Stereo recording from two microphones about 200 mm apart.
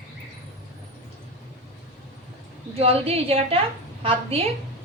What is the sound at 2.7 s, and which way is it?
A woman's voice, 30° right (ahead or behind).